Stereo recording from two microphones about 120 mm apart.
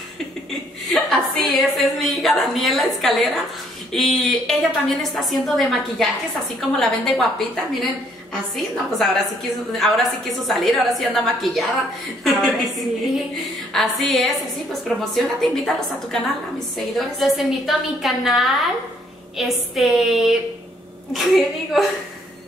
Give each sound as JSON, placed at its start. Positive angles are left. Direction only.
{"t": 0.5, "sound": "a woman's voice", "side_deg": 0}
{"t": 13.7, "sound": "a woman's voice", "side_deg": 0}